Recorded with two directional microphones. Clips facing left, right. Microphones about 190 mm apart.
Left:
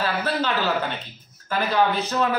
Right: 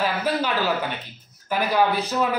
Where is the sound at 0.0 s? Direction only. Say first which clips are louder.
Right 1 dB; 15° right (ahead or behind).